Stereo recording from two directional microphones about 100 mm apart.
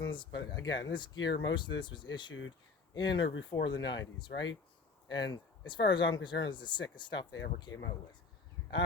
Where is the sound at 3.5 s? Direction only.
50° left (ahead or behind).